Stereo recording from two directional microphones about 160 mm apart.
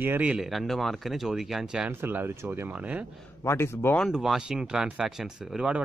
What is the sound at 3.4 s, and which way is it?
Speech, 15° left (ahead or behind).